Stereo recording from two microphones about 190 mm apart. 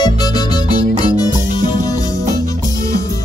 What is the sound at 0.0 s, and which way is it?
Music, 20° left (ahead or behind).